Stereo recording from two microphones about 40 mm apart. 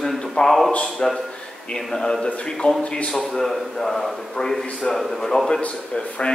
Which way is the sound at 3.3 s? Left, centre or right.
Centre.